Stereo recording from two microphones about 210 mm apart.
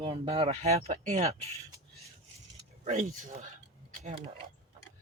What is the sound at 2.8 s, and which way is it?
Speech, 35° right (ahead or behind).